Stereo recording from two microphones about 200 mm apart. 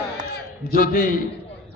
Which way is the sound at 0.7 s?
45° left (ahead or behind).